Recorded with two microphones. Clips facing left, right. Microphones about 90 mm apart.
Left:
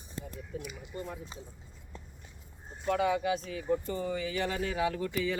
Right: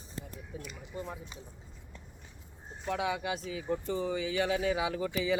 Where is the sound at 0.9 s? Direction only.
5° right (ahead or behind).